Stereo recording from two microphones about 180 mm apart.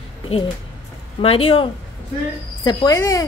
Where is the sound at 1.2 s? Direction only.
30° left (ahead or behind).